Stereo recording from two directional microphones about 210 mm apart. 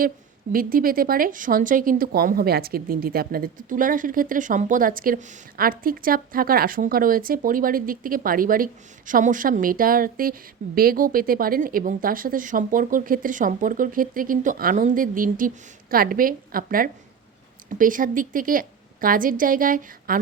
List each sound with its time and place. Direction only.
0.5 s speech: 45° right (ahead or behind)